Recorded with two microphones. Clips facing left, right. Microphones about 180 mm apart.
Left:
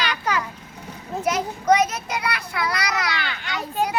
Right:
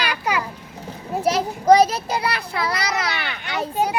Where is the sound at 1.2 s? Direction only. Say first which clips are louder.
Right 3 dB; 30° right (ahead or behind).